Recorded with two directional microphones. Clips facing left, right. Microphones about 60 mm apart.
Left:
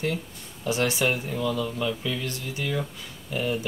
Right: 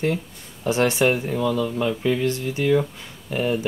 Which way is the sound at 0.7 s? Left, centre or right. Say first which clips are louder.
Right 5 dB; right.